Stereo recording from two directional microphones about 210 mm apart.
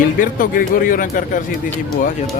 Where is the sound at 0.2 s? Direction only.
40° left (ahead or behind).